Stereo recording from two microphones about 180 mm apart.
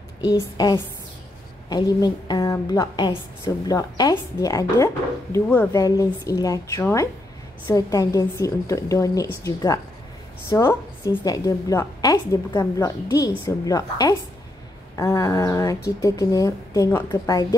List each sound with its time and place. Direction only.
0.2 s a woman's voice: 20° left (ahead or behind)